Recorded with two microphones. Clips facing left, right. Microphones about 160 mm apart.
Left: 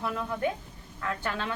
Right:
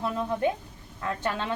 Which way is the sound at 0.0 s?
25° right (ahead or behind).